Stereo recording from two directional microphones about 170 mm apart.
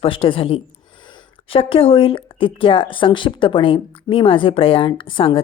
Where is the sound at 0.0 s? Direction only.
30° left (ahead or behind).